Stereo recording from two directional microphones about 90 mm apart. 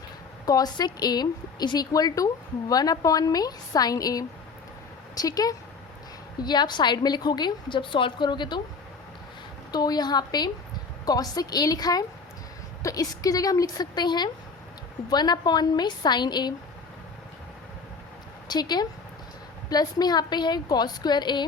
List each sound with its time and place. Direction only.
0.4 s a woman's voice: 45° left (ahead or behind)
9.7 s a woman's voice: 50° left (ahead or behind)
18.4 s a woman's voice: 50° left (ahead or behind)